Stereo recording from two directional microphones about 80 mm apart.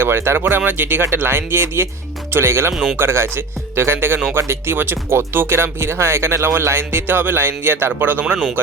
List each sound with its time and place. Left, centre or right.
0.0 s speech: right